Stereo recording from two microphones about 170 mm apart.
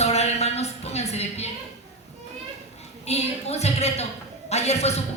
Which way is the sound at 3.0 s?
40° left (ahead or behind).